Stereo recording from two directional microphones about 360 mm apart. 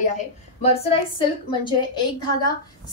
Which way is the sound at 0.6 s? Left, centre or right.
Centre.